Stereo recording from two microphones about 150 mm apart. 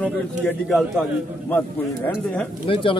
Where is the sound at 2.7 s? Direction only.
35° left (ahead or behind).